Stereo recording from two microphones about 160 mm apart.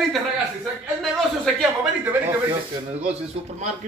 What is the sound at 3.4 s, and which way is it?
Speech, 40° right (ahead or behind).